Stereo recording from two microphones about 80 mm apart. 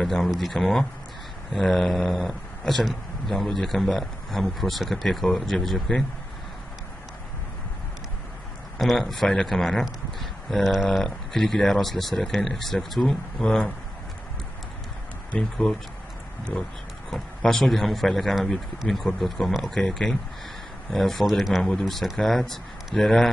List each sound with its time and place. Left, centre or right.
0.0 s speech: centre
8.7 s speech: centre
15.3 s speech: centre
17.1 s speech: centre